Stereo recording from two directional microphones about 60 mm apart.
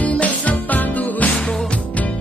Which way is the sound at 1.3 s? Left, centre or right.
Centre.